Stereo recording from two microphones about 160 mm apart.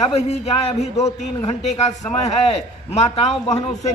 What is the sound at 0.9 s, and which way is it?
Speech, 20° left (ahead or behind).